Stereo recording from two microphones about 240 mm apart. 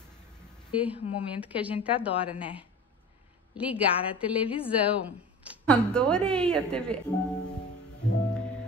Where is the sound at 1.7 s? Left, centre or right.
Left.